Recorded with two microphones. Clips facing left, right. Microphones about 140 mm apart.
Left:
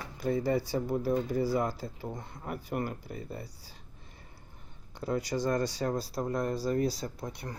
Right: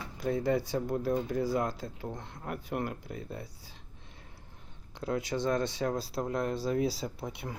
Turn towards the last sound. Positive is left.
turn(degrees=-5)  # may be behind; listen again after turning